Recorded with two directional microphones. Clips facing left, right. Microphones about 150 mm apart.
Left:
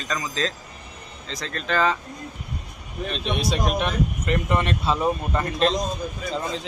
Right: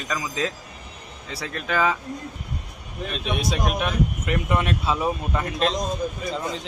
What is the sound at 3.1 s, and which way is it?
Speech, 5° right (ahead or behind).